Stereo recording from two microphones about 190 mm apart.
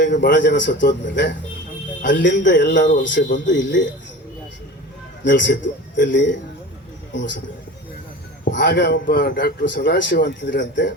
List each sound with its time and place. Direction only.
0.0 s speech: 65° left (ahead or behind)
2.0 s speech: 70° left (ahead or behind)
5.4 s a man's voice: 70° left (ahead or behind)
8.4 s speech: 65° left (ahead or behind); by 9.6 s 45° left (ahead or behind)
9.6 s speech: 70° left (ahead or behind)